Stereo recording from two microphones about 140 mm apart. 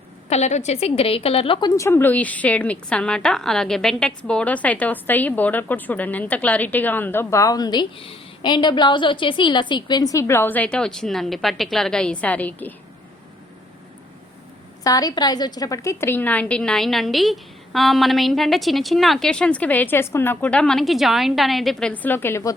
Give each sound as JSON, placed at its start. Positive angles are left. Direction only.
{"t": 0.3, "sound": "a woman's voice", "side_deg": 55}
{"t": 1.6, "sound": "a woman's voice", "side_deg": 20}
{"t": 14.8, "sound": "a woman's voice", "side_deg": 25}